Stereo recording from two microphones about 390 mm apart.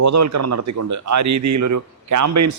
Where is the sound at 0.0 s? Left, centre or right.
Right.